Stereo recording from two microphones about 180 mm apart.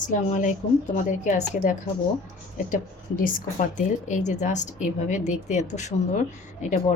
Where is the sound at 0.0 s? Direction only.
45° left (ahead or behind).